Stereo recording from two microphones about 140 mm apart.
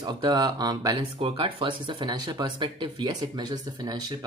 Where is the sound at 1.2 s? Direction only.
45° right (ahead or behind).